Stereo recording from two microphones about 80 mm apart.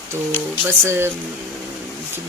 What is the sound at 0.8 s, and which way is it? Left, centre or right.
Speech, right.